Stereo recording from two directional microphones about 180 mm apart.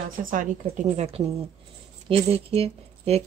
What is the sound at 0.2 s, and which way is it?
A woman's voice, 45° right (ahead or behind).